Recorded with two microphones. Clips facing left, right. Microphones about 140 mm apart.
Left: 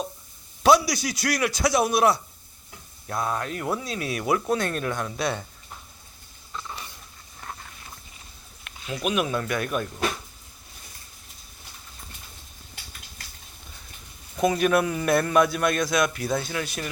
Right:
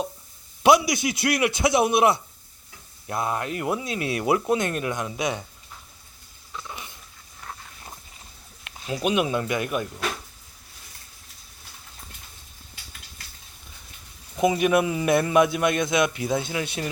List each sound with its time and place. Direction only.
0.6 s a man's voice: 20° right (ahead or behind)
6.5 s a sound: 10° right (ahead or behind)
8.9 s a man's voice: 30° right (ahead or behind)
14.3 s a man's voice: 15° right (ahead or behind)